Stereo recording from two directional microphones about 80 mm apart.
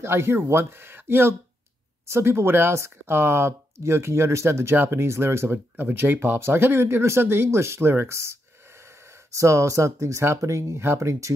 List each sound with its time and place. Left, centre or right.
0.0 s speech: right